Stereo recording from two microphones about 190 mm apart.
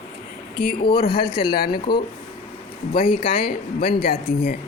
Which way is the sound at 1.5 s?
55° left (ahead or behind).